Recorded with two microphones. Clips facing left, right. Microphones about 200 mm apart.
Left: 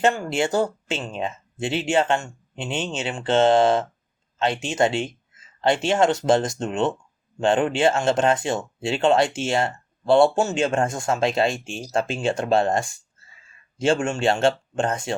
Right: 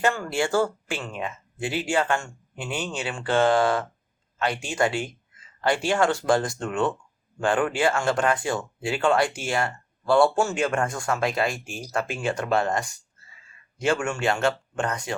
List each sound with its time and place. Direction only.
0.0 s speech: 20° left (ahead or behind)